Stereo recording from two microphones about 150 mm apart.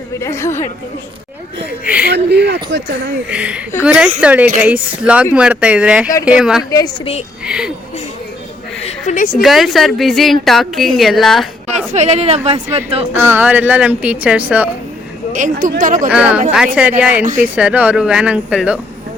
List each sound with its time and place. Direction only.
0.2 s a woman's voice: 20° left (ahead or behind)
2.0 s speech: 90° right
3.2 s a woman's voice: 5° right (ahead or behind)
6.7 s a woman's voice: 25° left (ahead or behind)
7.4 s a woman's voice: 5° right (ahead or behind)
8.8 s a sound: 55° left (ahead or behind)
9.4 s a woman's voice: centre (ahead or behind)
11.9 s a woman's voice: 45° right (ahead or behind)
13.1 s speech: 15° right (ahead or behind)
15.3 s speech: 60° right (ahead or behind)
16.0 s speech: 10° right (ahead or behind)